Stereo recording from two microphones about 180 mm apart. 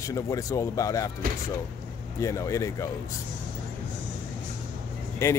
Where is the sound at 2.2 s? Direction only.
15° left (ahead or behind).